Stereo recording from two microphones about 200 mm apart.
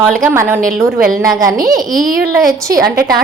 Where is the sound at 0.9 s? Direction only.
45° right (ahead or behind).